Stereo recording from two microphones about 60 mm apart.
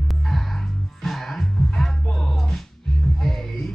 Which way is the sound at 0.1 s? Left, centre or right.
Centre.